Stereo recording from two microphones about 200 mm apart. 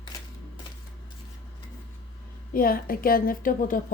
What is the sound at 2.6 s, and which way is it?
Speech, 45° left (ahead or behind).